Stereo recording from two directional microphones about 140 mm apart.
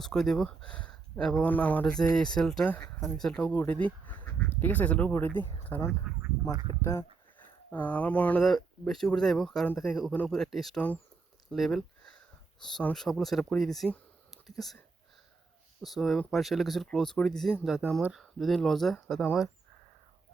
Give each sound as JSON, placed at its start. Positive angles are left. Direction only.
{"t": 0.0, "sound": "speech", "side_deg": 5}
{"t": 2.8, "sound": "speech", "side_deg": 15}
{"t": 3.2, "sound": "speech", "side_deg": 5}
{"t": 15.8, "sound": "speech", "side_deg": 0}